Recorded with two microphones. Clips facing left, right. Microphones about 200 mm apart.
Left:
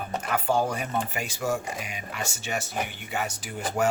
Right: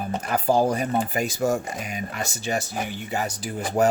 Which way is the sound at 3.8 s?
35° right (ahead or behind).